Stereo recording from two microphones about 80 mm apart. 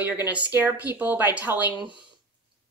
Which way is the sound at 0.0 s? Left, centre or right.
Right.